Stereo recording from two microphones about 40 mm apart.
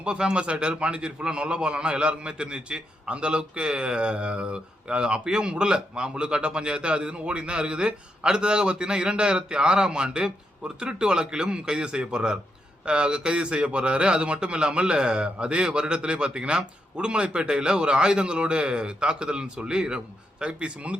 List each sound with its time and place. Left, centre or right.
0.0 s a man's voice: right